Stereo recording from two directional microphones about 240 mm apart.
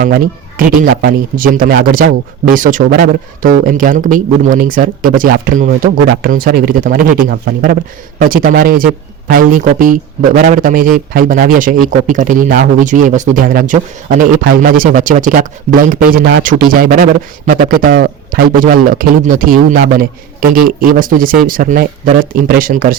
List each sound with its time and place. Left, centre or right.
0.0 s speech: right